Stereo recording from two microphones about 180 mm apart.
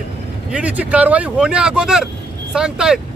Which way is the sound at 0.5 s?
10° right (ahead or behind).